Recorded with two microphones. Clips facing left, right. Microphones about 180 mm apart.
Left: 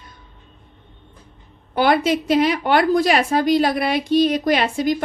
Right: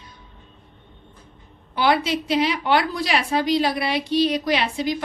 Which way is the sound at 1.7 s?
50° left (ahead or behind).